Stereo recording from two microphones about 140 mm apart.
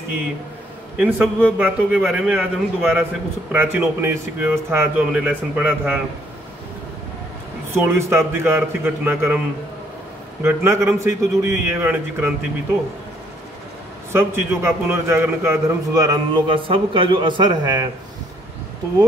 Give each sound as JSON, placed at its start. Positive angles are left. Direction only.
{"t": 0.9, "sound": "a man's voice", "side_deg": -10}
{"t": 3.5, "sound": "a man's voice", "side_deg": -20}
{"t": 7.7, "sound": "a man's voice", "side_deg": -15}
{"t": 10.4, "sound": "a man's voice", "side_deg": -20}
{"t": 14.1, "sound": "a man's voice", "side_deg": -15}